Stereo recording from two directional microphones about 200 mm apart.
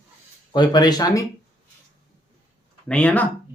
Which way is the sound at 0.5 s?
20° left (ahead or behind).